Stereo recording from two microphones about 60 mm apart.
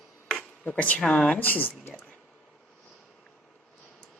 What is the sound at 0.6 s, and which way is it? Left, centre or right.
Speech, left.